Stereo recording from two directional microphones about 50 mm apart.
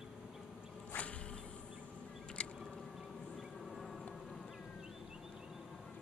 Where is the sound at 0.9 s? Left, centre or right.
Left.